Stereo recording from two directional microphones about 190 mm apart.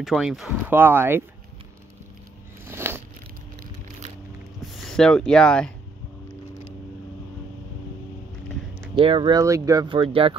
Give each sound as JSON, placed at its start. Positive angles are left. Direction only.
{"t": 0.0, "sound": "speech", "side_deg": 0}
{"t": 2.6, "sound": "a sound", "side_deg": -10}
{"t": 4.6, "sound": "speech", "side_deg": 0}
{"t": 8.9, "sound": "speech", "side_deg": -25}